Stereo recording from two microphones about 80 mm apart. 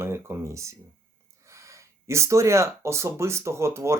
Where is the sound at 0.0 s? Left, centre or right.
Right.